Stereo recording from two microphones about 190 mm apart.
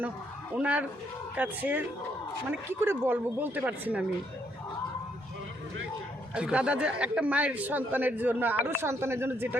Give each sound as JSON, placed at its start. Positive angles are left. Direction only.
{"t": 0.5, "sound": "a man's voice", "side_deg": -5}
{"t": 6.3, "sound": "a man's voice", "side_deg": -5}